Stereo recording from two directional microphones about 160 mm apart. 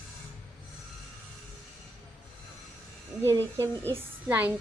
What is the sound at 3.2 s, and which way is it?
A child's voice, 15° right (ahead or behind).